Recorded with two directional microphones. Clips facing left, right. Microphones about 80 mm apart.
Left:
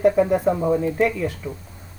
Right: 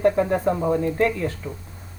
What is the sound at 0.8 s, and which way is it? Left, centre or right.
Speech, centre.